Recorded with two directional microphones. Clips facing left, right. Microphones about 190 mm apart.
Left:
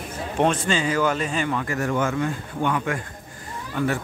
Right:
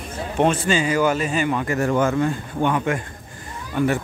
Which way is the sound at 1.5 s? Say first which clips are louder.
Right 4 dB; 25° right (ahead or behind).